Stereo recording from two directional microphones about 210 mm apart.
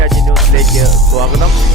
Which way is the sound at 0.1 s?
Centre (ahead or behind).